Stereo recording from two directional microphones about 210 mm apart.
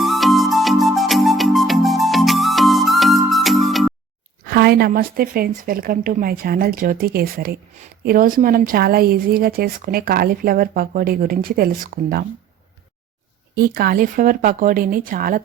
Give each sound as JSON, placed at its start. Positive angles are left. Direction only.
{"t": 0.0, "sound": "music", "side_deg": 0}
{"t": 4.4, "sound": "speech", "side_deg": -45}
{"t": 13.6, "sound": "speech", "side_deg": -45}